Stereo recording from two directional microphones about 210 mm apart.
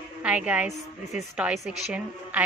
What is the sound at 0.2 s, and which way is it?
A woman's voice, 5° right (ahead or behind).